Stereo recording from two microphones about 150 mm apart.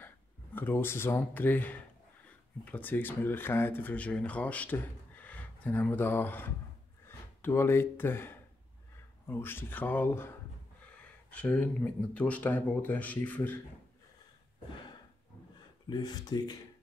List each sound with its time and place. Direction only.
0.0 s speech: 15° left (ahead or behind)
15.9 s speech: 25° left (ahead or behind)